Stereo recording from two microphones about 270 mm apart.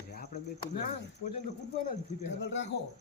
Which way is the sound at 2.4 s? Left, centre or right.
Left.